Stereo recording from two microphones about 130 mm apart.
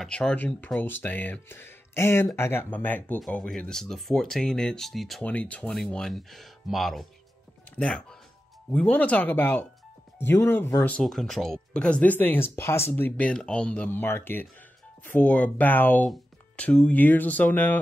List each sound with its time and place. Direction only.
0.0 s speech: 5° left (ahead or behind)
11.0 s speech: 5° left (ahead or behind)